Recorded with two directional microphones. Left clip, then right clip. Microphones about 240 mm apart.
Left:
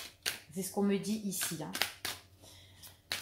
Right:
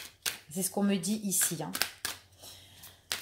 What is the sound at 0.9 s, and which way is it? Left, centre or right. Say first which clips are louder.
Speech: right 2 dB; right.